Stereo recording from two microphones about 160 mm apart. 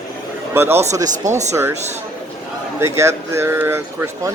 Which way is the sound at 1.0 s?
50° right (ahead or behind).